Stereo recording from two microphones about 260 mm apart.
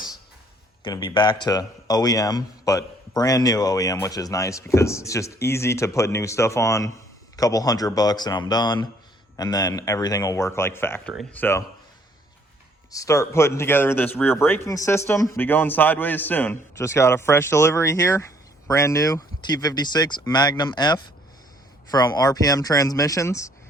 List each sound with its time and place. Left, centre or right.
0.9 s a man's voice: centre
12.9 s a man's voice: centre